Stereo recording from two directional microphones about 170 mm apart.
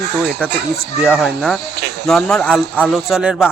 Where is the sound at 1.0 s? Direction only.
5° right (ahead or behind).